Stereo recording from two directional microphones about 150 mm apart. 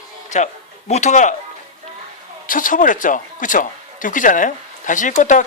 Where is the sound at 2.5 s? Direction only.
60° left (ahead or behind).